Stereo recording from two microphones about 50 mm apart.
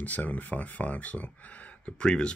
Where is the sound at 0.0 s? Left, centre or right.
Left.